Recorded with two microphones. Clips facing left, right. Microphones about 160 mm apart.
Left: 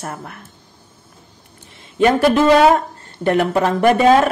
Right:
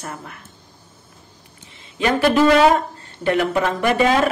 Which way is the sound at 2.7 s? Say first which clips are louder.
Left 2 dB; 40° left (ahead or behind).